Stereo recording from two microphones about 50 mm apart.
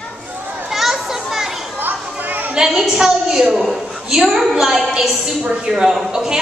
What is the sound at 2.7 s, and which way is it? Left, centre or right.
A woman's voice, centre.